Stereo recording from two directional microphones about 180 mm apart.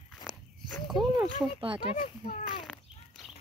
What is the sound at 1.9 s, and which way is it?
Speech, 50° left (ahead or behind).